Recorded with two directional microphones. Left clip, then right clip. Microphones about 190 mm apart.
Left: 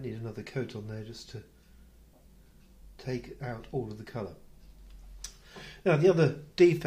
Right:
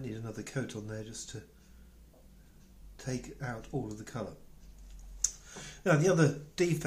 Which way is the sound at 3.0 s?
15° left (ahead or behind).